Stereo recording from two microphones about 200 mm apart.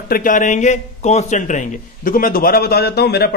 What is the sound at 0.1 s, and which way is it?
A man's voice, 40° left (ahead or behind).